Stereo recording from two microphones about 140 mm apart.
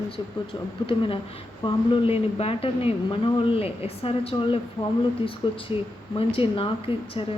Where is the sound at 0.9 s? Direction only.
40° left (ahead or behind).